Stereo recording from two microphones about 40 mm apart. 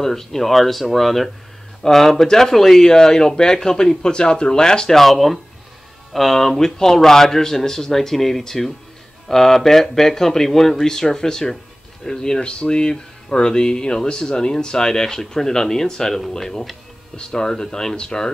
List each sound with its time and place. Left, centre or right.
0.0 s speech: centre
2.9 s speech: centre
4.9 s speech: centre